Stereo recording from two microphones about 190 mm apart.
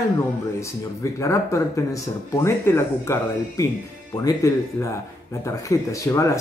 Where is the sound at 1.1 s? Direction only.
15° left (ahead or behind).